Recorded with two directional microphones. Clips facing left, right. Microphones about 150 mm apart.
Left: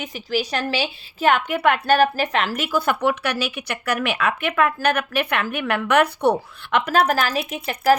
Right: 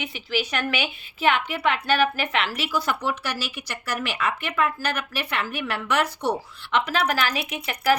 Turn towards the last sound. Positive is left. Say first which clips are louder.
# left 4 dB
turn(degrees=40)  # may be behind; listen again after turning